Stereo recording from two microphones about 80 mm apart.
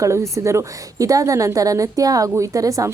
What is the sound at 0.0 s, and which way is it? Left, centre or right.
A woman's voice, right.